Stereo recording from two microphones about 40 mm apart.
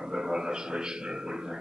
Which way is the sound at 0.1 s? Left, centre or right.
Centre.